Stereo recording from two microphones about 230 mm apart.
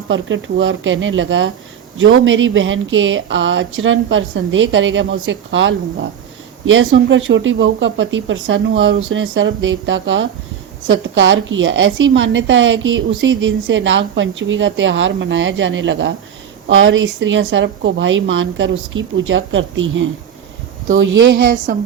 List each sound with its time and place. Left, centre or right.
0.1 s a woman's voice: right
21.7 s a woman's voice: right